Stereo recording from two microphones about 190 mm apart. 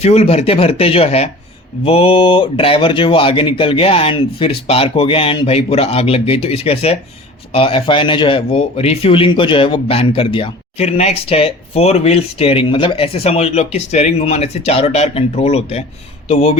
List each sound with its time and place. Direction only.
0.0 s speech: 30° left (ahead or behind)